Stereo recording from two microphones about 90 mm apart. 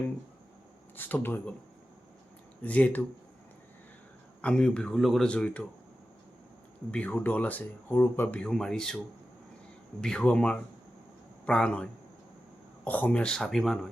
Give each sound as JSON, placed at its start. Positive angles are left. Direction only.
{"t": 0.9, "sound": "speech", "side_deg": 20}
{"t": 2.6, "sound": "speech", "side_deg": 15}
{"t": 4.4, "sound": "speech", "side_deg": 10}
{"t": 5.3, "sound": "speech", "side_deg": 10}
{"t": 6.9, "sound": "speech", "side_deg": 15}
{"t": 8.4, "sound": "speech", "side_deg": 5}
{"t": 10.0, "sound": "speech", "side_deg": 10}